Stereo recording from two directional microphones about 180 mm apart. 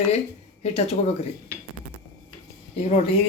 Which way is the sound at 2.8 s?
40° left (ahead or behind).